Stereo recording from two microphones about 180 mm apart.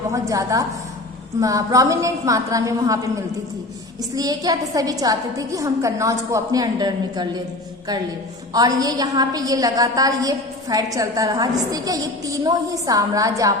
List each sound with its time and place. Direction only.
0.1 s a woman's voice: 20° right (ahead or behind)
8.5 s a woman's voice: 20° right (ahead or behind)